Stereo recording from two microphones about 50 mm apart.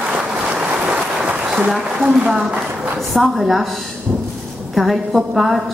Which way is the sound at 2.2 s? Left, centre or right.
Centre.